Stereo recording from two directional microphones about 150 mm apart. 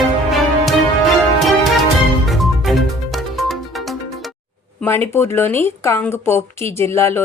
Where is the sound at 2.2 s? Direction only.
Centre (ahead or behind).